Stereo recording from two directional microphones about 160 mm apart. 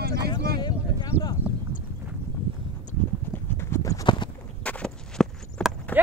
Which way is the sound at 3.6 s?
15° left (ahead or behind).